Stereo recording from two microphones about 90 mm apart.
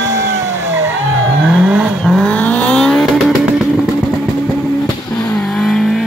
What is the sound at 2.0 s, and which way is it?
Vehicle, 5° left (ahead or behind).